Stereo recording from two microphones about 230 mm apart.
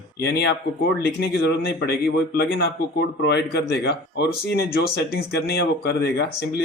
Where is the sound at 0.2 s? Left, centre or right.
Left.